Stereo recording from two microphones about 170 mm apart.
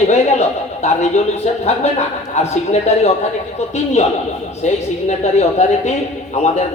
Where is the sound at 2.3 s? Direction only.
40° left (ahead or behind).